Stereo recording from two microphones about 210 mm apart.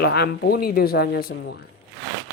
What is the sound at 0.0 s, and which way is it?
Speech, 50° left (ahead or behind).